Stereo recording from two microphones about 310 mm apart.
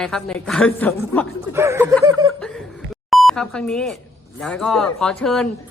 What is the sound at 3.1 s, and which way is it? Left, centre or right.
A man's voice, centre.